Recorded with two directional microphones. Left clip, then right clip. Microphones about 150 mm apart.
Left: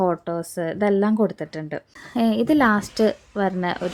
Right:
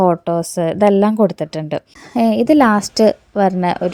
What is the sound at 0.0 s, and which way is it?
Speech, 45° right (ahead or behind).